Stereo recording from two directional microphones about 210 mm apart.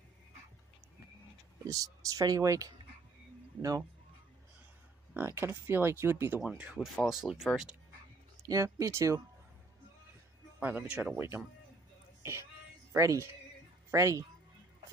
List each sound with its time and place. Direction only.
1.6 s speech: 15° right (ahead or behind)
5.1 s speech: 10° right (ahead or behind)
8.4 s speech: 15° right (ahead or behind)
10.6 s speech: 10° right (ahead or behind)